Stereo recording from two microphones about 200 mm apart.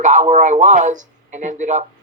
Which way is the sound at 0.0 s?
35° right (ahead or behind).